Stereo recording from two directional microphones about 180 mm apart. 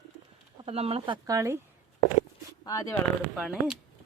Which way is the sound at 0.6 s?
35° right (ahead or behind).